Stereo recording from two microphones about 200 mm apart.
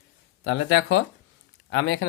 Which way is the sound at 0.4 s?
70° left (ahead or behind).